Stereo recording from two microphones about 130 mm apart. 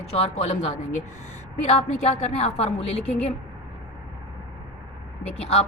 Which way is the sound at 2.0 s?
60° left (ahead or behind).